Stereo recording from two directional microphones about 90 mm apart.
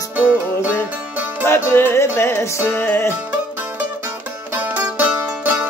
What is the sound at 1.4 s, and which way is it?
Music, 25° left (ahead or behind).